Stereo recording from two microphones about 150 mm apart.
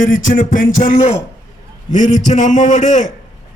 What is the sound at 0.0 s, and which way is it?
A man's voice, 65° left (ahead or behind).